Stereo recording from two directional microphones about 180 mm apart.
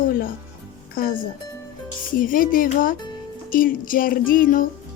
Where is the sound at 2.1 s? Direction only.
50° left (ahead or behind).